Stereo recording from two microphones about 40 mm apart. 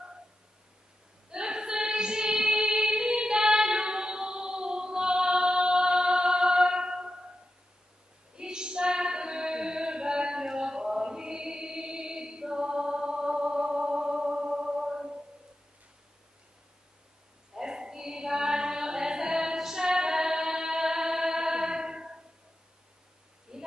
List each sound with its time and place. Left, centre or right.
1.3 s music: right
8.4 s female singing: right
17.6 s chant: centre
23.5 s a sound: centre